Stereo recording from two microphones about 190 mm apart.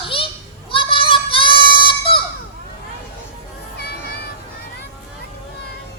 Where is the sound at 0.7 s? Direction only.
25° left (ahead or behind).